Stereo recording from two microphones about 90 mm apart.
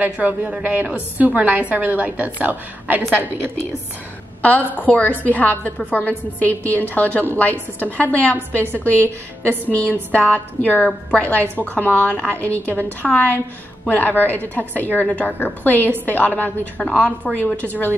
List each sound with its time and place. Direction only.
0.0 s a woman's voice: 15° right (ahead or behind)
4.4 s a woman's voice: 15° left (ahead or behind)